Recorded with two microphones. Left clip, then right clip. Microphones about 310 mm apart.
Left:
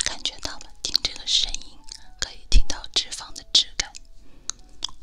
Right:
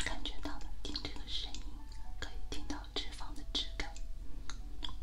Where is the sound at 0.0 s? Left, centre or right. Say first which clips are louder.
Left 13 dB; left.